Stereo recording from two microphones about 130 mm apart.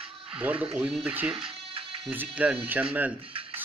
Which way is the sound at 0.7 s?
5° right (ahead or behind).